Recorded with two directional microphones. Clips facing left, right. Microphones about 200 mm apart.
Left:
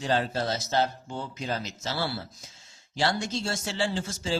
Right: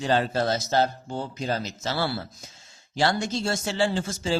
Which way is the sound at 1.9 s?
55° right (ahead or behind).